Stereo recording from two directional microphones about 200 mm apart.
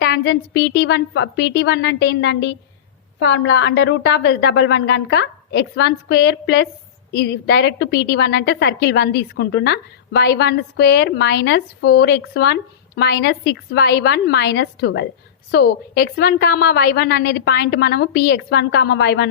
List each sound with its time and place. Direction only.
0.0 s a woman's voice: 55° left (ahead or behind)